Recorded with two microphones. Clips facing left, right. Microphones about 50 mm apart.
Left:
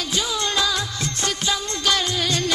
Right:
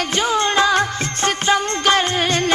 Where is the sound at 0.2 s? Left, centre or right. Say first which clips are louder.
Right 7 dB; right.